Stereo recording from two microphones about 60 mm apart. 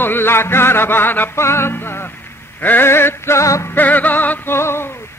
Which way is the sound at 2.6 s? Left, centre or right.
Left.